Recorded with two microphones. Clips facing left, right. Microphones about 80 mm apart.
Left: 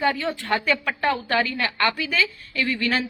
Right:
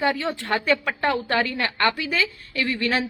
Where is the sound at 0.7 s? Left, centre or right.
Right.